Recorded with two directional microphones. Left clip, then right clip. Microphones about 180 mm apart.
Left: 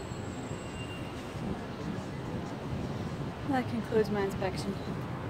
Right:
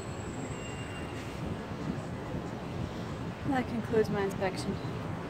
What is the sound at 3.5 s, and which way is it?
Speech, 15° left (ahead or behind).